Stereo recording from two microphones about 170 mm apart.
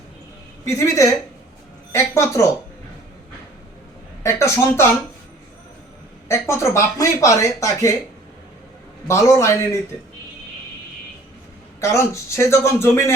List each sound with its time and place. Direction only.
0.6 s speech: 20° left (ahead or behind)
1.9 s a sound: 15° left (ahead or behind)
4.2 s speech: 15° left (ahead or behind)
6.5 s speech: 15° left (ahead or behind)
9.0 s speech: 15° left (ahead or behind)
11.8 s speech: 15° left (ahead or behind)